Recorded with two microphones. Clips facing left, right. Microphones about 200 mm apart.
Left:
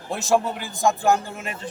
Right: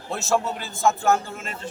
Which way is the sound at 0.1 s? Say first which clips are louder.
Left 2 dB; 15° left (ahead or behind).